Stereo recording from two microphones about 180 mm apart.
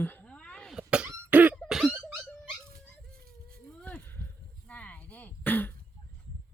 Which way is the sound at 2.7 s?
55° right (ahead or behind).